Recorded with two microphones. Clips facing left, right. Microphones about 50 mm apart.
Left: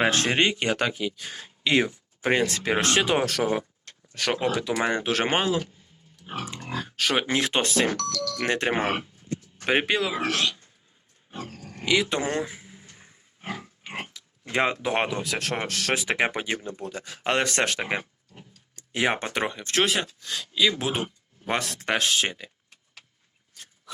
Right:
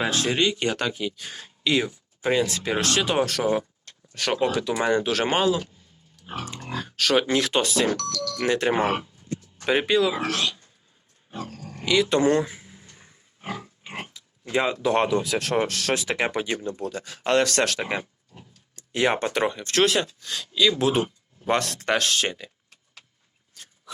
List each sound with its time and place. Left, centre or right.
0.0 s speech: left
0.6 s speech: left
1.6 s speech: left
3.2 s speech: centre
4.8 s speech: left
6.2 s speech: centre; by 10.2 s left
11.9 s a sound: centre
14.4 s speech: left
14.8 s speech: left
15.2 s speech: centre
16.0 s speech: left